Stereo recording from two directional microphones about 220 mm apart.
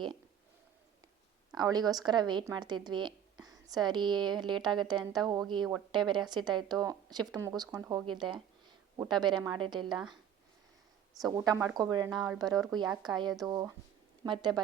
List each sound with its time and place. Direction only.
1.5 s a woman's voice: 20° right (ahead or behind)
11.2 s a woman's voice: 15° right (ahead or behind)